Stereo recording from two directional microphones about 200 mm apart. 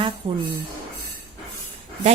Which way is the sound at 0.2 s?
25° right (ahead or behind).